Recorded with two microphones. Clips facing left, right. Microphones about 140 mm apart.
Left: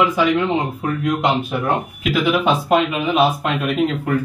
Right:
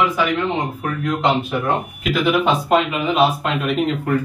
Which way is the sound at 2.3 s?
Centre (ahead or behind).